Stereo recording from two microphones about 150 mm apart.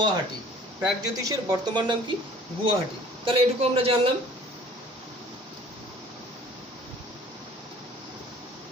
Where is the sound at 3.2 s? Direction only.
40° right (ahead or behind).